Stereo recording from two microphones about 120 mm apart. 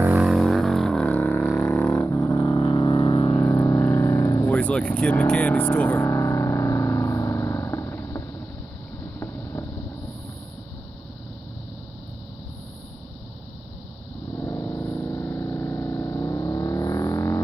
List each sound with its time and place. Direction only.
0.1 s music: 10° right (ahead or behind)
0.4 s music: 5° left (ahead or behind)
1.9 s didgeridoo: 25° left (ahead or behind)
3.3 s vehicle: 20° left (ahead or behind)
4.5 s speech: 10° left (ahead or behind)
6.0 s music: 25° left (ahead or behind)
9.2 s vehicle: 25° left (ahead or behind)
14.3 s a sound: 25° left (ahead or behind)